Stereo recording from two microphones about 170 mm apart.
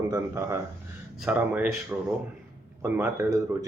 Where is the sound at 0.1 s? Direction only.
15° right (ahead or behind).